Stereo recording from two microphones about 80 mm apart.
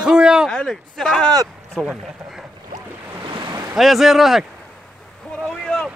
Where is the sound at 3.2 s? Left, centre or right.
Right.